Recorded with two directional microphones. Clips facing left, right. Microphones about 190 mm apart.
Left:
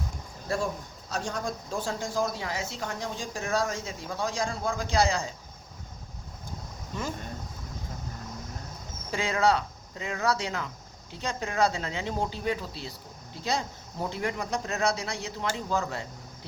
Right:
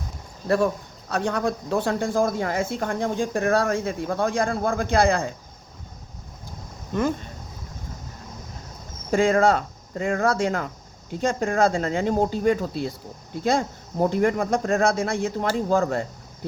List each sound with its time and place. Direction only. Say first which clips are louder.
0.4 s speech: right 9 dB; 65° right (ahead or behind)
6.9 s speech: right 12 dB; 55° right (ahead or behind)
9.1 s speech: right 7 dB; 50° right (ahead or behind)